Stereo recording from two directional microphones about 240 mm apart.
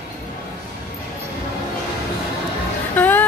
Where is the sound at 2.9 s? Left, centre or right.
Centre.